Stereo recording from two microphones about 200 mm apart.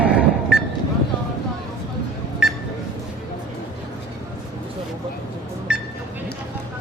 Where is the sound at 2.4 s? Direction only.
5° right (ahead or behind).